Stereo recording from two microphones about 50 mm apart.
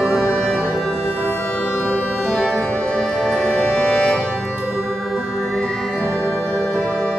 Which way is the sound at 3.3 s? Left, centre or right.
Left.